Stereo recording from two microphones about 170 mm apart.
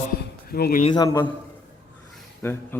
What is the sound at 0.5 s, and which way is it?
Speech, 65° left (ahead or behind).